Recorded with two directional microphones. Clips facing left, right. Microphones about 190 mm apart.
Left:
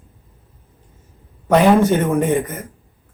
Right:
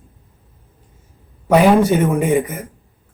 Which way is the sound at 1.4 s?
10° right (ahead or behind).